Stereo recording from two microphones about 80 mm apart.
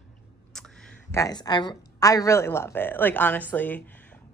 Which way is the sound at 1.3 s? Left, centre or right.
Left.